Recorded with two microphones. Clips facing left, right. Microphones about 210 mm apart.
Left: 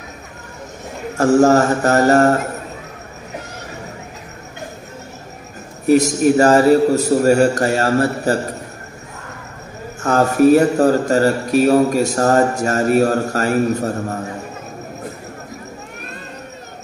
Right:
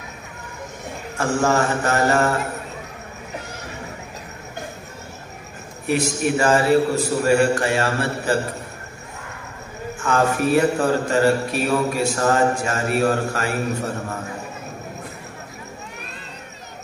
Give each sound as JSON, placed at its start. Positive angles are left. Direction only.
{"t": 1.1, "sound": "speech", "side_deg": 40}
{"t": 5.9, "sound": "speech", "side_deg": 40}
{"t": 10.0, "sound": "speech", "side_deg": 40}